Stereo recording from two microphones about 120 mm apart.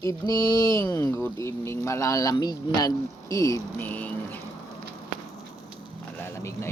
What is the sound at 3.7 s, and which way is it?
Speech, 15° left (ahead or behind).